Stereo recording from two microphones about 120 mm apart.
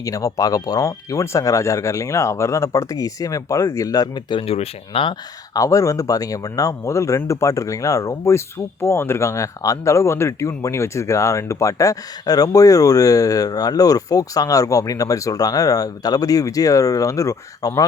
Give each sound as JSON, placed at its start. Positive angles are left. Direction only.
{"t": 0.0, "sound": "speech", "side_deg": 30}
{"t": 5.5, "sound": "speech", "side_deg": 25}